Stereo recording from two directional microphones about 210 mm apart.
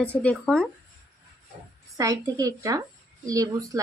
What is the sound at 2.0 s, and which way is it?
Speech, 15° right (ahead or behind).